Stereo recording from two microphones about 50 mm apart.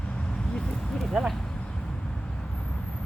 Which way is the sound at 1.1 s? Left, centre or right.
Centre.